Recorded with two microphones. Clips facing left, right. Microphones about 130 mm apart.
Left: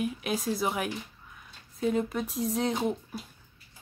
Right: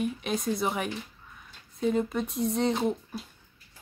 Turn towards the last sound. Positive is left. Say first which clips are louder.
# right 2 dB
turn(degrees=0)  # may be behind; listen again after turning